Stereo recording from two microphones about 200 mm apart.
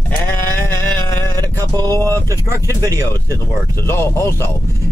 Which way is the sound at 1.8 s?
20° right (ahead or behind).